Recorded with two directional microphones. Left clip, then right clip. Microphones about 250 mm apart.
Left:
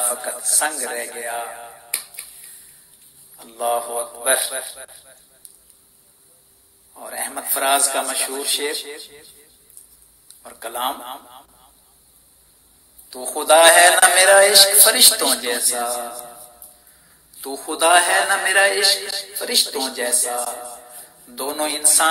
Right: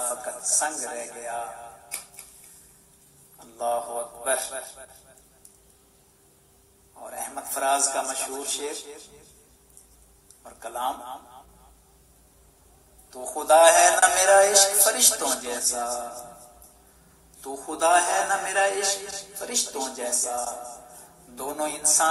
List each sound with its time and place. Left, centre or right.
0.0 s a man's voice: left
3.3 s a man's voice: left
7.0 s a man's voice: left
10.4 s a man's voice: left
13.1 s a man's voice: left
17.4 s a man's voice: left